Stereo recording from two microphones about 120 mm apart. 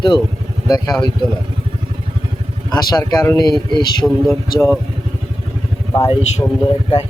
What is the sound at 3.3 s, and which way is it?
Speech, 35° left (ahead or behind).